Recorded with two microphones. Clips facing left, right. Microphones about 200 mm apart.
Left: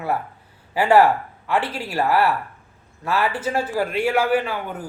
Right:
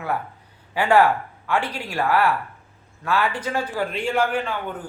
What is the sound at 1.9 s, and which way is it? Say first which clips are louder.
Speech: left 1 dB; 25° left (ahead or behind).